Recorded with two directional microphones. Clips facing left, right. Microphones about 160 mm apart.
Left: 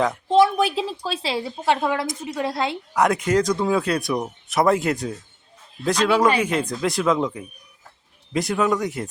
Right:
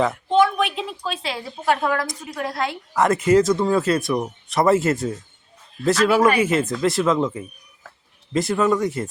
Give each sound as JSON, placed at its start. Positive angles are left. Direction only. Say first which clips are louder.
{"t": 0.3, "sound": "a woman's voice", "louder": "left 2 dB", "side_deg": 35}
{"t": 2.9, "sound": "speech", "louder": "right 3 dB", "side_deg": 0}